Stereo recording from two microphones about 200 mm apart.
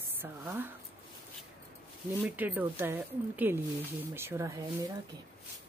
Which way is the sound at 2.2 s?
10° right (ahead or behind).